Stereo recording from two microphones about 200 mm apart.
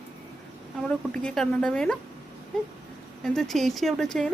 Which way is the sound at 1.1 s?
5° left (ahead or behind).